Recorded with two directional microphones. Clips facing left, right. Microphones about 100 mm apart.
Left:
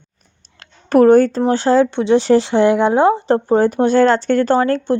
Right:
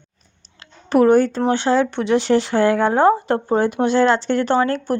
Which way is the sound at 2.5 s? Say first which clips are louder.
Left 3 dB; 20° left (ahead or behind).